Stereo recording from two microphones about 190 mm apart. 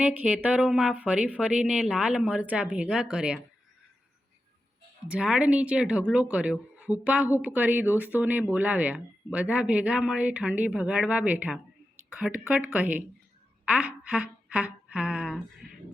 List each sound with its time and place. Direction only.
0.0 s speech: 10° right (ahead or behind)
5.0 s speech: 5° right (ahead or behind)
13.7 s a sound: 5° right (ahead or behind)